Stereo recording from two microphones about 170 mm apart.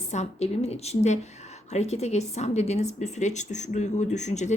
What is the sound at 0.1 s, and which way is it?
A woman's voice, 40° left (ahead or behind).